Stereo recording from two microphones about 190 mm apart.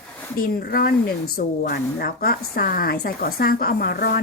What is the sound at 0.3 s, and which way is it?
Speech, 50° left (ahead or behind).